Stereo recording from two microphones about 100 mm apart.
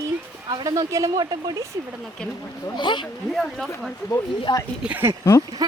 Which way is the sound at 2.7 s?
50° left (ahead or behind).